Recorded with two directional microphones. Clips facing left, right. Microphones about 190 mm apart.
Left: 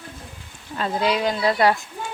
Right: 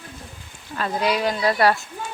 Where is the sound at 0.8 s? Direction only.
25° left (ahead or behind).